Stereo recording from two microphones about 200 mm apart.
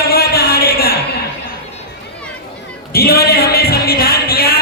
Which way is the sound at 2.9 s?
50° left (ahead or behind).